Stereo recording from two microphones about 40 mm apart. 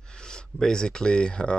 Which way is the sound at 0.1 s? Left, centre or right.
Left.